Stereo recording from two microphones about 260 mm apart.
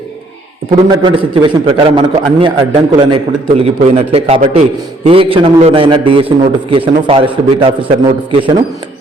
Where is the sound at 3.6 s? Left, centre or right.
Right.